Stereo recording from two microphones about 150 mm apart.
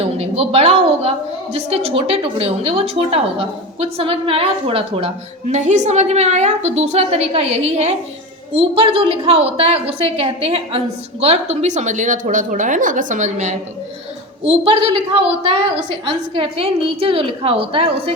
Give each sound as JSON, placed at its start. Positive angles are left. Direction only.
{"t": 0.0, "sound": "a woman's voice", "side_deg": -40}
{"t": 14.4, "sound": "a woman's voice", "side_deg": -35}